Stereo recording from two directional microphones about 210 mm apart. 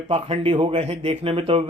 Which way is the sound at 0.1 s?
25° right (ahead or behind).